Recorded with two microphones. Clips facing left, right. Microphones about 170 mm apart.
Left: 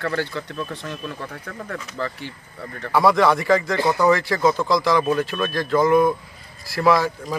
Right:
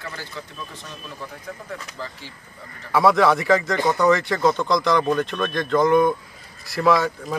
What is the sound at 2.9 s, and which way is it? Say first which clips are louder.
Speech: even; centre (ahead or behind).